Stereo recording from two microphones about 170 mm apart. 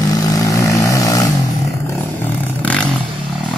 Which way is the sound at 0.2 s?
20° left (ahead or behind).